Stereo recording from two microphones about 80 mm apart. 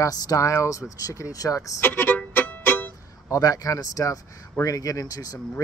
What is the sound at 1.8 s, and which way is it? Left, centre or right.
Music, left.